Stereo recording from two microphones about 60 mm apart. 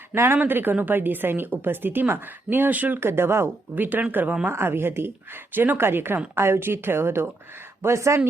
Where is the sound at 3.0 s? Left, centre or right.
Right.